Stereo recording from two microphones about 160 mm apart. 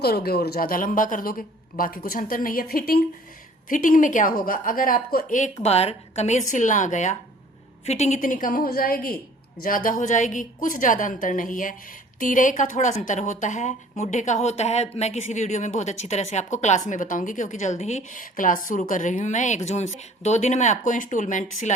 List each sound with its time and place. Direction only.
0.0 s a woman's voice: 80° left
3.7 s a woman's voice: 55° left (ahead or behind)
5.6 s a woman's voice: 40° left (ahead or behind)